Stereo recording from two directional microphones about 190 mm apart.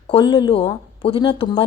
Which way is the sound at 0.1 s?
25° left (ahead or behind).